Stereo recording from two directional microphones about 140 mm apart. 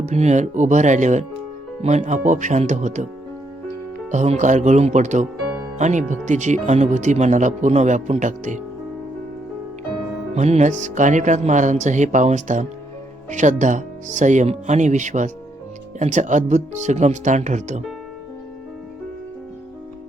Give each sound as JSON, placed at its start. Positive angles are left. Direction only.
{"t": 0.1, "sound": "speech", "side_deg": -55}
{"t": 4.1, "sound": "speech", "side_deg": -55}
{"t": 10.3, "sound": "speech", "side_deg": -55}